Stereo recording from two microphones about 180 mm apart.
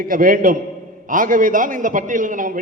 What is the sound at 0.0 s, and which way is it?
A man's voice, 50° right (ahead or behind).